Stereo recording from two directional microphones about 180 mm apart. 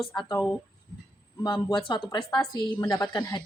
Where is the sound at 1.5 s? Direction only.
25° left (ahead or behind).